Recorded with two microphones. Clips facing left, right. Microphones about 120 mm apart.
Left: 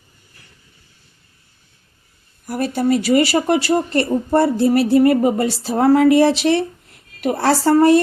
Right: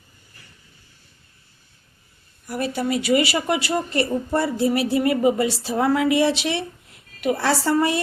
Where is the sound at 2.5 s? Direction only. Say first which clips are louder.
Left 6 dB; 40° left (ahead or behind).